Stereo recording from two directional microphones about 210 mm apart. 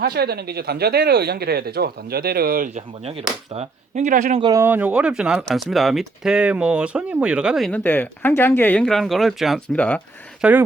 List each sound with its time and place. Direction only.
0.0 s speech: 50° right (ahead or behind)
4.4 s speech: 10° right (ahead or behind); by 10.0 s 5° left (ahead or behind)
10.4 s speech: 5° right (ahead or behind)